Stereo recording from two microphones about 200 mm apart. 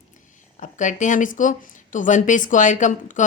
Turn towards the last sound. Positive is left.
turn(degrees=40)  # may be behind; listen again after turning